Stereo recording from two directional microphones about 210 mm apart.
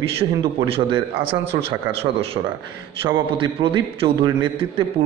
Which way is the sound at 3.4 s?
25° right (ahead or behind).